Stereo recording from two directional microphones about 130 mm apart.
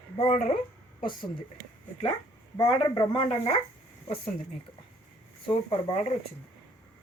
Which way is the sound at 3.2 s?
45° left (ahead or behind).